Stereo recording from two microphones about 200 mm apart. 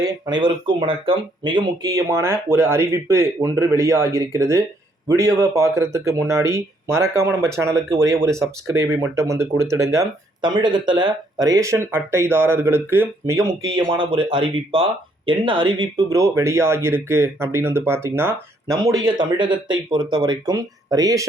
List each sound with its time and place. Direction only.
0.0 s speech: 25° right (ahead or behind)
13.7 s speech: 25° right (ahead or behind)